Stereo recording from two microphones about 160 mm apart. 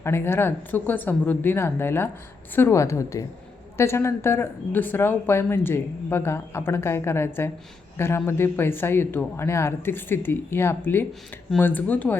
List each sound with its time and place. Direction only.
0.0 s a woman's voice: 15° left (ahead or behind)